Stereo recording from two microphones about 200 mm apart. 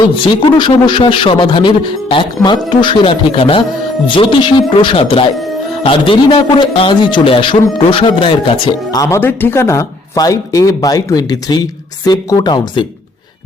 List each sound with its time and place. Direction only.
0.3 s speech: 25° left (ahead or behind)
8.9 s speech: 15° left (ahead or behind)